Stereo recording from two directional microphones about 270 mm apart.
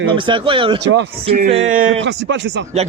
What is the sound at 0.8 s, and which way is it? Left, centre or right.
Speech, right.